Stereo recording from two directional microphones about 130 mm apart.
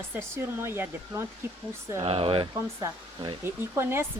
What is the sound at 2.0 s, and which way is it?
Speech, 45° right (ahead or behind).